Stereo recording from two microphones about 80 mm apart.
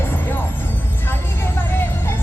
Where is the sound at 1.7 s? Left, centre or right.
Left.